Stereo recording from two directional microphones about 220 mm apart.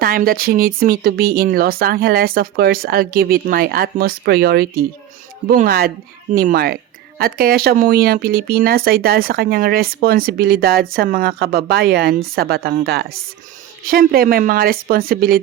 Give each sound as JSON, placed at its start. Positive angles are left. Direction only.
{"t": 0.0, "sound": "speech", "side_deg": -40}